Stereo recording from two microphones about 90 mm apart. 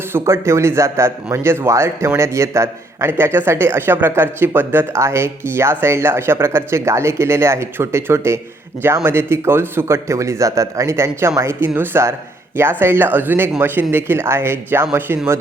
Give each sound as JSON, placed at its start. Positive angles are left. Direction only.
{"t": 0.1, "sound": "speech", "side_deg": -30}